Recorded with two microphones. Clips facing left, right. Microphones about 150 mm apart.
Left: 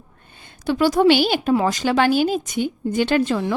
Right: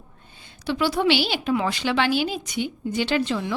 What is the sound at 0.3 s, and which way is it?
A woman's voice, 50° left (ahead or behind).